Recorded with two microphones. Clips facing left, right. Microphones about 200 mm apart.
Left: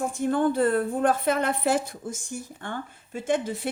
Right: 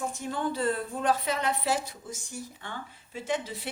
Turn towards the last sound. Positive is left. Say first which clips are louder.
# left 6 dB
turn(degrees=50)  # may be behind; listen again after turning